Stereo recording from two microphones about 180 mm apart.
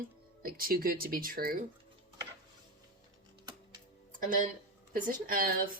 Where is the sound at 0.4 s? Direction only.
55° right (ahead or behind).